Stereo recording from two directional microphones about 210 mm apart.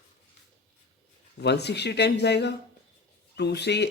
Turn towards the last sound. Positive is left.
turn(degrees=55)  # may be behind; listen again after turning